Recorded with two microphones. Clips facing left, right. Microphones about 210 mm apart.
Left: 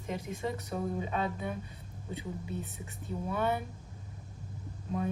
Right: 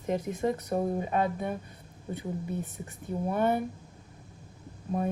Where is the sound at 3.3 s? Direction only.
50° right (ahead or behind).